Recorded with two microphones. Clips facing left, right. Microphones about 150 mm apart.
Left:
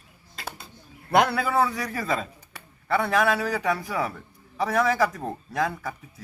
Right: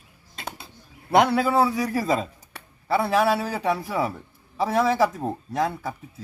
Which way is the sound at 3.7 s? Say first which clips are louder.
Right 4 dB; centre (ahead or behind).